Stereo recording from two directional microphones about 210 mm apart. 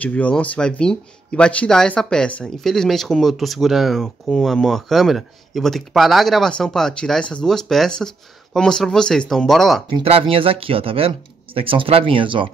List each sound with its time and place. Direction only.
0.0 s speech: 5° left (ahead or behind)
9.9 s speech: 25° right (ahead or behind)